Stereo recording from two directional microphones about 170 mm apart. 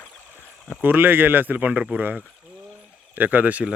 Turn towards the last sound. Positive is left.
turn(degrees=-10)  # may be behind; listen again after turning